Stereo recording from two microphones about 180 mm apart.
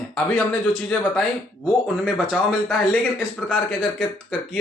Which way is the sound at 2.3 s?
5° left (ahead or behind).